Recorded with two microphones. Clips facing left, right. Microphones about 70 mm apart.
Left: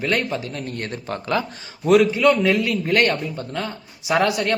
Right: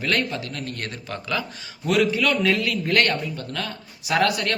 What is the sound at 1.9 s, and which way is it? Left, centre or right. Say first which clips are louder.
A man's voice: left 6 dB; left.